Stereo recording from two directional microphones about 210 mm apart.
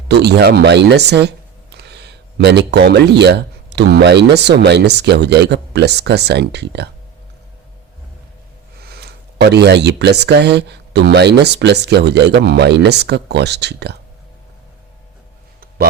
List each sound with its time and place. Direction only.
0.1 s speech: 55° right (ahead or behind)
8.8 s speech: 50° right (ahead or behind)